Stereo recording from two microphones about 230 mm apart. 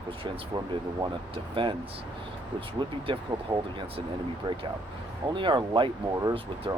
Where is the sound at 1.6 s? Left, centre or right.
Right.